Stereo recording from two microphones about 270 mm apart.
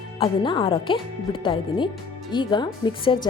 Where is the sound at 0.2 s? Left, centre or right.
Centre.